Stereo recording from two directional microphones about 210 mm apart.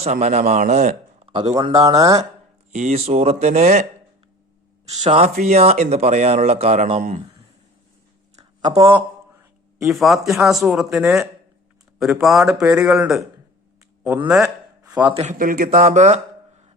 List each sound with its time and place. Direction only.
0.0 s a man's voice: 30° right (ahead or behind); by 2.2 s 15° right (ahead or behind)
2.7 s speech: 30° right (ahead or behind)
5.0 s speech: 30° right (ahead or behind)
8.6 s a man's voice: 25° right (ahead or behind)
9.0 s a sound: 10° right (ahead or behind)
9.9 s speech: centre (ahead or behind)
14.3 s a sound: 5° right (ahead or behind)
15.1 s speech: 35° right (ahead or behind)